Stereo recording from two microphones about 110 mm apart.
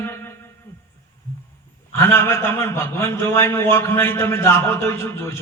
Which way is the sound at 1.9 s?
25° left (ahead or behind).